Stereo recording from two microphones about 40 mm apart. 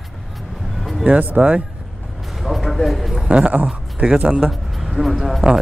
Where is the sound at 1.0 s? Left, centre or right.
Right.